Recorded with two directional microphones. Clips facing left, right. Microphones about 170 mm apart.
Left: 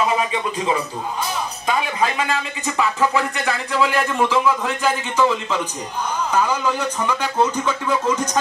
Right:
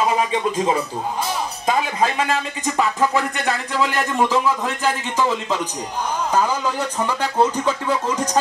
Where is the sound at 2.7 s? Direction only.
40° right (ahead or behind).